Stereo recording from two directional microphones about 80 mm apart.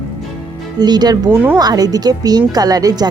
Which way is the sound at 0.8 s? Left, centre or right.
Right.